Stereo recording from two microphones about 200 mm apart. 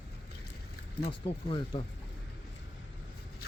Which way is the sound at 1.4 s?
25° left (ahead or behind).